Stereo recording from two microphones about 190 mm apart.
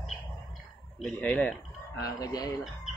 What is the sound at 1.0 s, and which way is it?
Speech, 5° left (ahead or behind).